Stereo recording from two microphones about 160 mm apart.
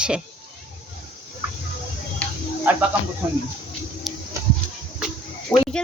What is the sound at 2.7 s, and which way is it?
Speech, 10° right (ahead or behind).